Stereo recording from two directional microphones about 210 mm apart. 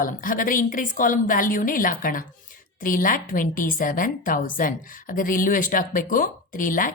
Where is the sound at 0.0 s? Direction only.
40° left (ahead or behind).